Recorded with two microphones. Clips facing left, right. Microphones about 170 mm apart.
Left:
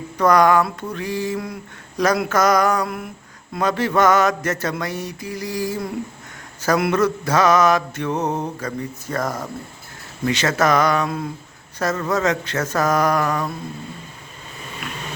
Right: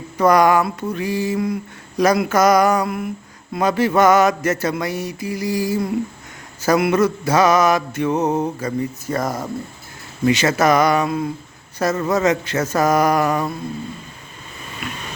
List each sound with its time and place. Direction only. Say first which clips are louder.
0.2 s mantra: right 1 dB; 10° right (ahead or behind)
14.8 s vehicle: right 3 dB; 5° right (ahead or behind)